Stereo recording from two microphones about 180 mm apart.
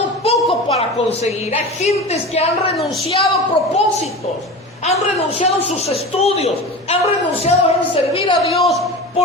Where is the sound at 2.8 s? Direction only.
Centre (ahead or behind).